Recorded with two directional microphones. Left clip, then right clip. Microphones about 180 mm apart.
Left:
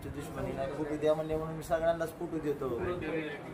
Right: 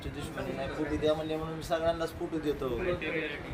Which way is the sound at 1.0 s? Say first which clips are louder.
Left 1 dB; 5° left (ahead or behind).